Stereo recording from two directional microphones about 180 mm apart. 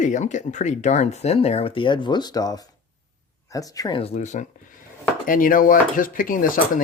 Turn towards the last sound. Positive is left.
turn(degrees=50)  # may be behind; listen again after turning